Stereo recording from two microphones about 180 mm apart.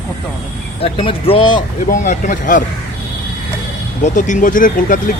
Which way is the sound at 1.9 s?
45° left (ahead or behind).